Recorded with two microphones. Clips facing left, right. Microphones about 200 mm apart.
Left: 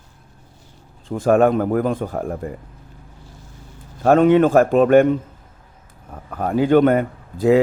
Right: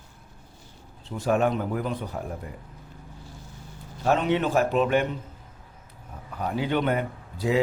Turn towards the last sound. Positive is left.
turn(degrees=50)  # may be behind; listen again after turning